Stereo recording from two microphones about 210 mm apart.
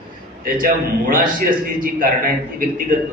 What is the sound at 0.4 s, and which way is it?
A man's voice, 40° right (ahead or behind).